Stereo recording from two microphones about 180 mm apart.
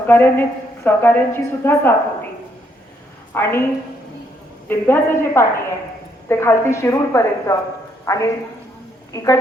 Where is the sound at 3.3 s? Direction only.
15° left (ahead or behind).